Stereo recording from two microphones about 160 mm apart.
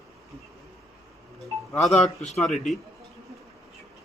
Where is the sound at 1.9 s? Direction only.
40° left (ahead or behind).